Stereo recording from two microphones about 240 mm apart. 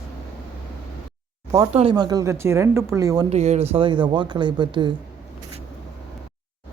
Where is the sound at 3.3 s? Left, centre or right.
Right.